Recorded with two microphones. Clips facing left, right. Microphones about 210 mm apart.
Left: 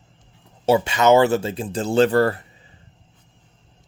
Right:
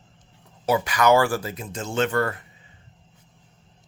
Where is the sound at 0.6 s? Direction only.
25° left (ahead or behind).